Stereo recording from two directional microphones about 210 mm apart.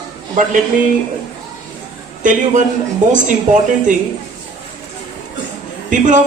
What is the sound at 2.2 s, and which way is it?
Speech, 40° right (ahead or behind).